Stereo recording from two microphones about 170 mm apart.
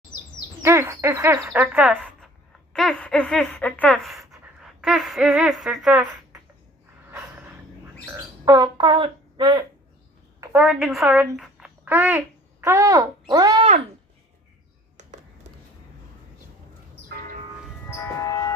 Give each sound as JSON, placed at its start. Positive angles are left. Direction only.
{"t": 0.6, "sound": "speech", "side_deg": -15}
{"t": 2.7, "sound": "speech", "side_deg": 5}
{"t": 7.1, "sound": "snort", "side_deg": -10}
{"t": 8.4, "sound": "speech", "side_deg": -25}
{"t": 10.4, "sound": "speech", "side_deg": -10}
{"t": 11.3, "sound": "a sound", "side_deg": 0}
{"t": 11.9, "sound": "speech", "side_deg": -10}
{"t": 17.9, "sound": "music", "side_deg": 15}